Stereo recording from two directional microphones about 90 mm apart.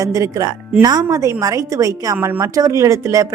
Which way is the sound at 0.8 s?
50° right (ahead or behind).